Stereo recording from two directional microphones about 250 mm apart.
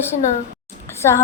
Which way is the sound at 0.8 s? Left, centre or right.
Centre.